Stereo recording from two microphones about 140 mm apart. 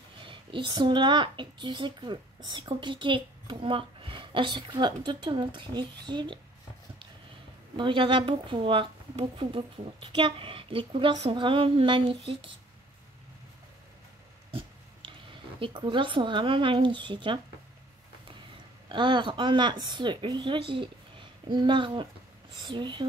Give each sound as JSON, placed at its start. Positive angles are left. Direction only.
{"t": 0.2, "sound": "a woman's voice", "side_deg": -35}
{"t": 7.7, "sound": "a woman's voice", "side_deg": -35}
{"t": 15.6, "sound": "a woman's voice", "side_deg": -35}
{"t": 18.9, "sound": "a woman's voice", "side_deg": -35}